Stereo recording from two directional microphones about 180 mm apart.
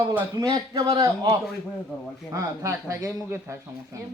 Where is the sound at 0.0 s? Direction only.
15° right (ahead or behind).